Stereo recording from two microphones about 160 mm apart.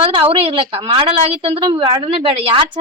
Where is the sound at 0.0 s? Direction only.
35° right (ahead or behind).